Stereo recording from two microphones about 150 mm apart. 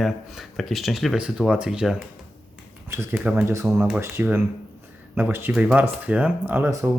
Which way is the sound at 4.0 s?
15° right (ahead or behind).